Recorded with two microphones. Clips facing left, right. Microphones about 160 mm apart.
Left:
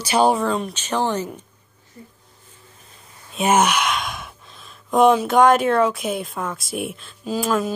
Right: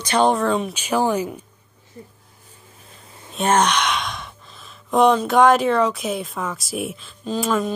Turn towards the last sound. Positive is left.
turn(degrees=0)  # may be behind; listen again after turning